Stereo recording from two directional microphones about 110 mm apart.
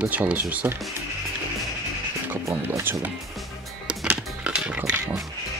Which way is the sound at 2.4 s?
25° right (ahead or behind).